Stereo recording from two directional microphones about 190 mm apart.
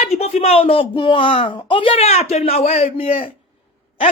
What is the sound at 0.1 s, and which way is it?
Speech, 35° left (ahead or behind).